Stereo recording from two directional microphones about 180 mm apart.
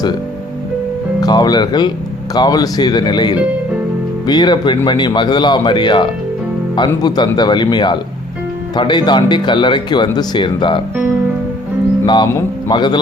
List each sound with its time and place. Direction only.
1.2 s speech: 25° left (ahead or behind)
12.0 s speech: 25° left (ahead or behind)